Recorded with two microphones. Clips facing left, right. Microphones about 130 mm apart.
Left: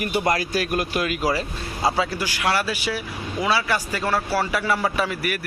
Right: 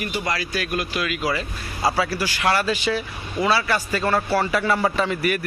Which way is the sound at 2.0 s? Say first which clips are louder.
Right 1 dB; 20° left (ahead or behind).